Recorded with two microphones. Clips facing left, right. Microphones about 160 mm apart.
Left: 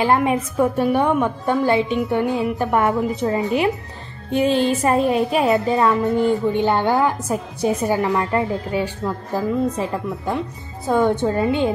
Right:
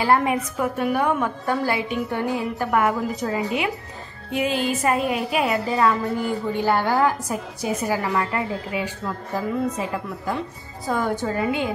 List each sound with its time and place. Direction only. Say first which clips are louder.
0.0 s a woman's voice: left 2 dB; 20° left (ahead or behind)
10.9 s a woman's voice: left 6 dB; 25° left (ahead or behind)